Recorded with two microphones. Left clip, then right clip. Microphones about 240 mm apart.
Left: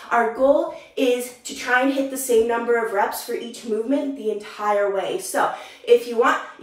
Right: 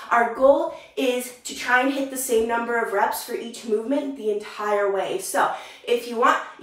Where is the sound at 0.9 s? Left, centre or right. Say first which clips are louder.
Left 4 dB; centre.